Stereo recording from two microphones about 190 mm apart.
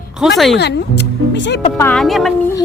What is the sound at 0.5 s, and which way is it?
Music, 60° left (ahead or behind).